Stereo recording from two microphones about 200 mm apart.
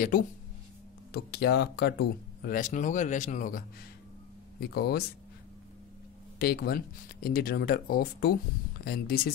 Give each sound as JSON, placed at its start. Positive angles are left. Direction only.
{"t": 1.1, "sound": "speech", "side_deg": 55}
{"t": 4.6, "sound": "speech", "side_deg": 50}
{"t": 6.4, "sound": "speech", "side_deg": 50}